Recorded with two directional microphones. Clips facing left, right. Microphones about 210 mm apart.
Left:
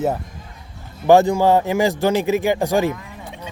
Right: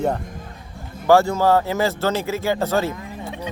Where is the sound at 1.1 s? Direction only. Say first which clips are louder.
Left 2 dB; 15° left (ahead or behind).